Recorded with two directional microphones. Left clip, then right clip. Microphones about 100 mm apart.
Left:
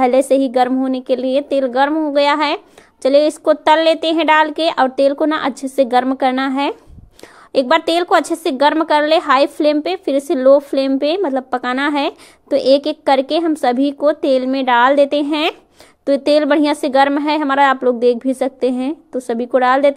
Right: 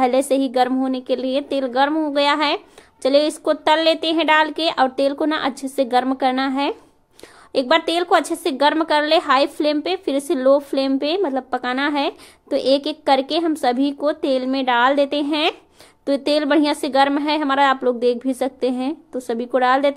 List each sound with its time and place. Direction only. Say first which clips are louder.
0.0 s a child's voice: left 5 dB; 35° left (ahead or behind)